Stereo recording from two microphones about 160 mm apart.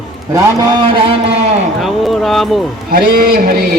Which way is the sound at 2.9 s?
65° right (ahead or behind).